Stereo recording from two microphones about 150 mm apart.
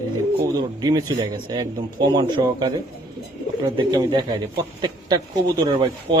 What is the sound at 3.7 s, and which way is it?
A man's voice, 30° right (ahead or behind).